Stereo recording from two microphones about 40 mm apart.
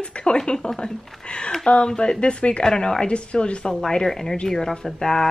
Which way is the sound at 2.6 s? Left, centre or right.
Centre.